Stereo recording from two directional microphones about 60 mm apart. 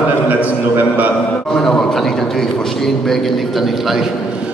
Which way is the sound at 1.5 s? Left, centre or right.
Centre.